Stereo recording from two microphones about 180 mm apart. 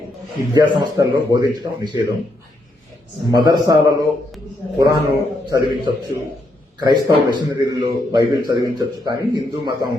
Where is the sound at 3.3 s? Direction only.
25° right (ahead or behind).